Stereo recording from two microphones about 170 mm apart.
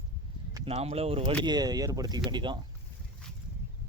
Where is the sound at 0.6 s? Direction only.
35° right (ahead or behind).